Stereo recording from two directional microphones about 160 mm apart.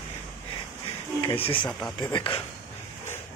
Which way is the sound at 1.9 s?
25° left (ahead or behind).